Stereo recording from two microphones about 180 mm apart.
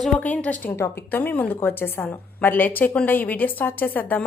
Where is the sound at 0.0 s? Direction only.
5° left (ahead or behind).